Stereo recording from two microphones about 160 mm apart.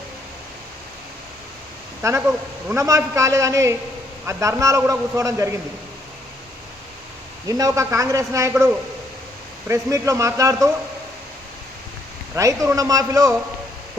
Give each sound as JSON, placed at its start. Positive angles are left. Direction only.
{"t": 2.0, "sound": "a man's voice", "side_deg": -20}
{"t": 7.4, "sound": "a man's voice", "side_deg": -25}
{"t": 12.4, "sound": "a man's voice", "side_deg": -20}